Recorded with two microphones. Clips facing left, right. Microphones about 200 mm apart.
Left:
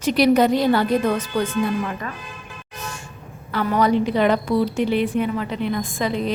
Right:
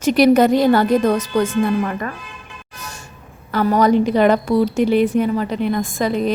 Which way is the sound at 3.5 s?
40° right (ahead or behind).